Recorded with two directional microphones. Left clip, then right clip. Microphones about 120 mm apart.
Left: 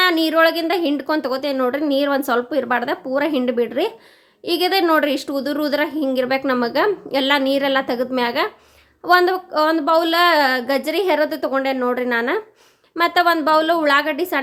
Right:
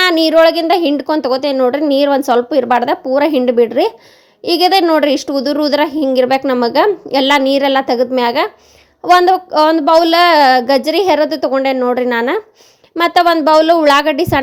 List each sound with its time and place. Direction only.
0.0 s speech: 50° right (ahead or behind)